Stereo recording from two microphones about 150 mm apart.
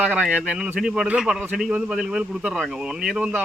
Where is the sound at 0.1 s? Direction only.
5° right (ahead or behind).